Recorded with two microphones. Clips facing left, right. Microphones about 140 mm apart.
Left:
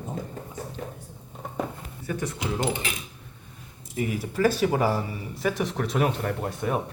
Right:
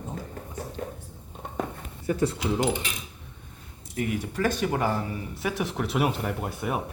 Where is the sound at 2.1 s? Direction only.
25° right (ahead or behind).